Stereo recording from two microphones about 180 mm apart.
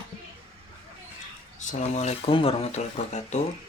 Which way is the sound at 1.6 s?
40° left (ahead or behind).